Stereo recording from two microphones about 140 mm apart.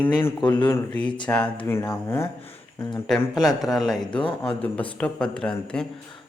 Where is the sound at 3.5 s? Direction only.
30° left (ahead or behind).